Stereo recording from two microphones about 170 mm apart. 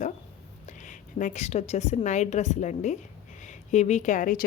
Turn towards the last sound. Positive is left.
turn(degrees=55)  # may be behind; listen again after turning